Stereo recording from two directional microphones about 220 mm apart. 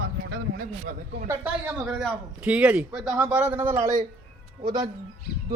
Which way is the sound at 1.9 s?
5° right (ahead or behind).